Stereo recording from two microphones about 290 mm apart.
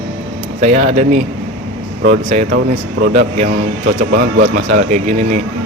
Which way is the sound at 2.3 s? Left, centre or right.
Right.